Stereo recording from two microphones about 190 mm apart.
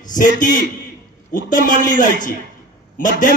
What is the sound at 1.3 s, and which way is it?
A man's voice, 45° left (ahead or behind).